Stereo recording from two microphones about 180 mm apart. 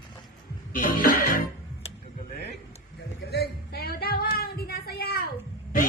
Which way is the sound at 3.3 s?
60° left (ahead or behind).